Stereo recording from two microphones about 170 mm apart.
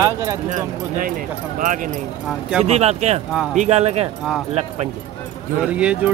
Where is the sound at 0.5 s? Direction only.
50° right (ahead or behind).